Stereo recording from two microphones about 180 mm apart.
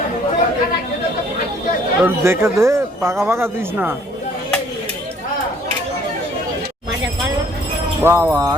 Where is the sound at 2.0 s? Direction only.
15° right (ahead or behind).